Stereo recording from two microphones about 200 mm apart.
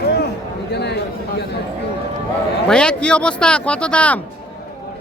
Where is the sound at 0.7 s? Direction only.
55° left (ahead or behind).